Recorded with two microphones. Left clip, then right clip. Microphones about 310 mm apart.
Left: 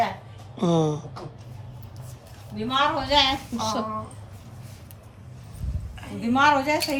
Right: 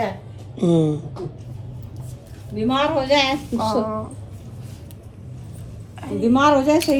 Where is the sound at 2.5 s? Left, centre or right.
Centre.